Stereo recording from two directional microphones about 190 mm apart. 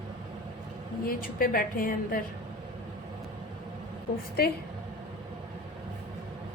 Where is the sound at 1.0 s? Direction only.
50° left (ahead or behind).